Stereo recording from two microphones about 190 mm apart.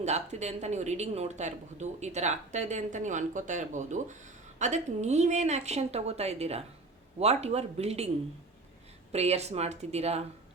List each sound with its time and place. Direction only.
0.0 s speech: 35° right (ahead or behind)
9.1 s speech: 35° right (ahead or behind)